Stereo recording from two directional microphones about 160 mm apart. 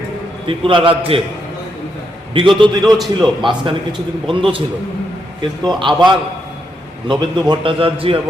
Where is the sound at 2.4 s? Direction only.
30° right (ahead or behind).